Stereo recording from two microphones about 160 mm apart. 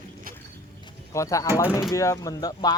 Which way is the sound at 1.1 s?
20° left (ahead or behind).